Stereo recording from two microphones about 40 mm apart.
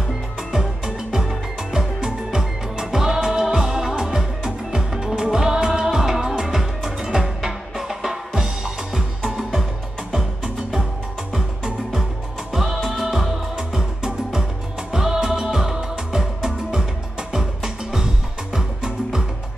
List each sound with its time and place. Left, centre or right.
0.5 s music: centre
17.9 s music: centre